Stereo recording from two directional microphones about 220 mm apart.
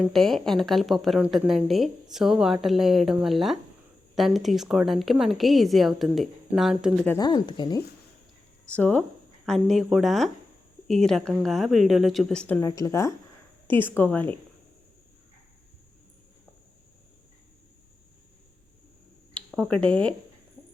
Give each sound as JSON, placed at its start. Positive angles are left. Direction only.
{"t": 0.0, "sound": "a woman's voice", "side_deg": 0}
{"t": 7.1, "sound": "speech", "side_deg": 20}
{"t": 8.7, "sound": "a woman's voice", "side_deg": 5}
{"t": 19.3, "sound": "speech", "side_deg": 0}